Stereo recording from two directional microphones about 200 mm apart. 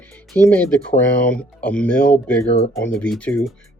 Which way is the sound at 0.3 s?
10° left (ahead or behind).